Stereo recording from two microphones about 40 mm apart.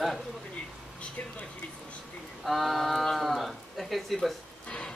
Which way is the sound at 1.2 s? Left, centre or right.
Left.